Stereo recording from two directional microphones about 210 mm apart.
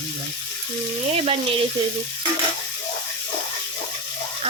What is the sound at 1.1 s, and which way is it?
Speech, 30° right (ahead or behind).